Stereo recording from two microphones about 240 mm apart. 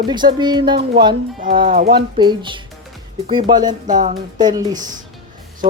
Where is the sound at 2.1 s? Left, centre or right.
Centre.